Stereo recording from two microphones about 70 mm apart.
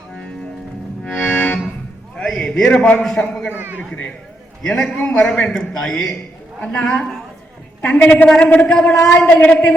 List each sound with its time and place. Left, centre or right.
1.0 s accordion: left
2.1 s a sound: centre
3.0 s a man's voice: centre
3.5 s speech: right
4.9 s a man's voice: centre